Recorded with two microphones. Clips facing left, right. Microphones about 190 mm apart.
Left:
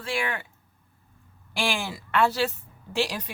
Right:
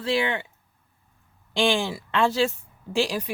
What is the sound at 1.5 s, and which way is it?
Speech, 20° right (ahead or behind).